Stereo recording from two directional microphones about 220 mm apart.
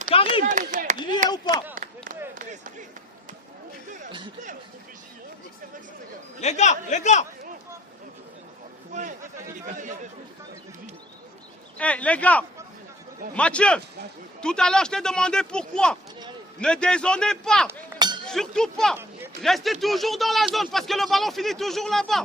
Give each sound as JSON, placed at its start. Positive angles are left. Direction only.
{"t": 0.1, "sound": "a sound", "side_deg": 25}
{"t": 0.4, "sound": "a sound", "side_deg": -35}
{"t": 1.3, "sound": "speech", "side_deg": 20}
{"t": 1.7, "sound": "a sound", "side_deg": -40}
{"t": 2.3, "sound": "speech", "side_deg": -40}
{"t": 6.4, "sound": "a man's voice", "side_deg": 30}
{"t": 8.9, "sound": "speech", "side_deg": -35}
{"t": 11.8, "sound": "a man's voice", "side_deg": 5}
{"t": 17.7, "sound": "chink", "side_deg": -20}
{"t": 18.3, "sound": "a man's voice", "side_deg": 0}